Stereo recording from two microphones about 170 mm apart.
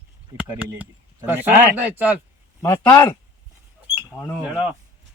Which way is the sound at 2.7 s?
25° left (ahead or behind).